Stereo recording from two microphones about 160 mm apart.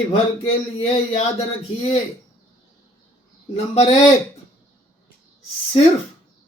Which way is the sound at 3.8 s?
40° left (ahead or behind).